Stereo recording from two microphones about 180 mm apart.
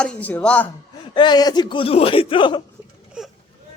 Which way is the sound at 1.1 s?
25° left (ahead or behind).